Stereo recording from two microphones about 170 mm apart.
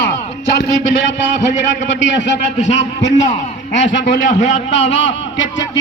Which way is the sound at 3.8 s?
90° left.